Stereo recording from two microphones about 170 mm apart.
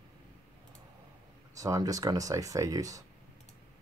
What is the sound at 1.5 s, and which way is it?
Speech, 20° right (ahead or behind).